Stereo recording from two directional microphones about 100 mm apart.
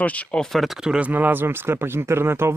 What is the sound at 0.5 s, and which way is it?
Speech, centre (ahead or behind).